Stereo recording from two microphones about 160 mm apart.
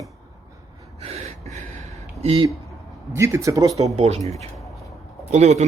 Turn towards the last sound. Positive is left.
turn(degrees=-45)  # may be behind; listen again after turning